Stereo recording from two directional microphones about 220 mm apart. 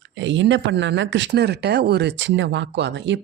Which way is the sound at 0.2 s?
55° right (ahead or behind).